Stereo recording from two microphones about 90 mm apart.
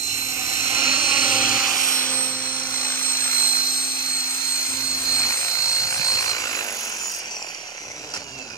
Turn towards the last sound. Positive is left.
turn(degrees=40)  # may be behind; listen again after turning